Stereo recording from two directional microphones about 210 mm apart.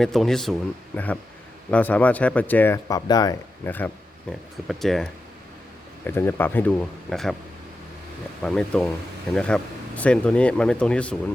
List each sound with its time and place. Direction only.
0.0 s speech: centre (ahead or behind)
6.1 s speech: 10° left (ahead or behind)
8.4 s speech: 5° left (ahead or behind)